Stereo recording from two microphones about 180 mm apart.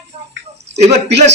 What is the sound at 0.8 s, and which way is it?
Speech, 35° right (ahead or behind).